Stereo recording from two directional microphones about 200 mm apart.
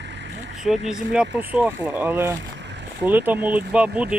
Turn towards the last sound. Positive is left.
turn(degrees=-5)  # may be behind; listen again after turning